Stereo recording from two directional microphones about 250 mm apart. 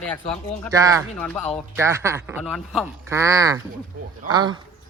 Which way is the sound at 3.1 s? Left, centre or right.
Centre.